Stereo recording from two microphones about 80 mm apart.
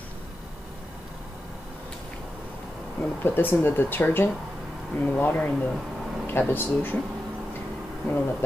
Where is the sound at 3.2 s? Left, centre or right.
Left.